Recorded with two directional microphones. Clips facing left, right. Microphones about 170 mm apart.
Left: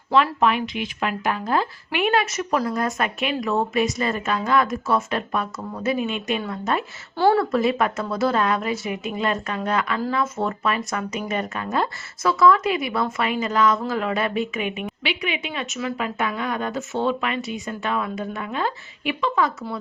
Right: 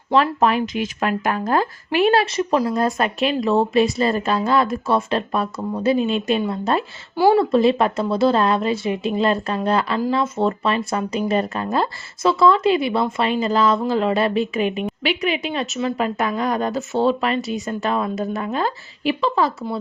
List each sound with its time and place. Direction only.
0.1 s speech: 40° right (ahead or behind)
7.2 s speech: 10° right (ahead or behind)
7.5 s a woman's voice: 30° right (ahead or behind)